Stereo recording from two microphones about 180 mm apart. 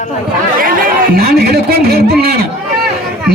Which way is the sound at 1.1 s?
60° right (ahead or behind).